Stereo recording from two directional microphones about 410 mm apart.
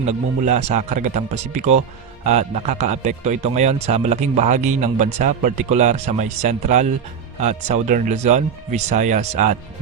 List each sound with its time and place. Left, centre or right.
0.0 s speech: centre